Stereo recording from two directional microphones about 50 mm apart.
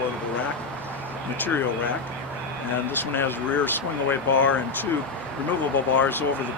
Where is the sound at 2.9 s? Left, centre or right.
Left.